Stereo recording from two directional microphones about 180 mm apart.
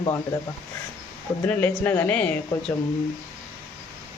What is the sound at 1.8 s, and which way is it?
Speech, 10° left (ahead or behind).